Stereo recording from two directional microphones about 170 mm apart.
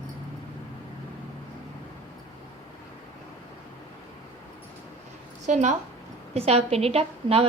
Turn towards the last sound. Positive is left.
turn(degrees=-35)  # may be behind; listen again after turning